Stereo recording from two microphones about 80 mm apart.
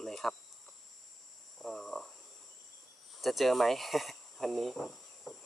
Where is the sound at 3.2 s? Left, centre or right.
Centre.